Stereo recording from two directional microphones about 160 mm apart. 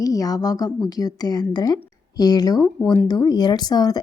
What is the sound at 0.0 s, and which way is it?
A woman's voice, 20° left (ahead or behind).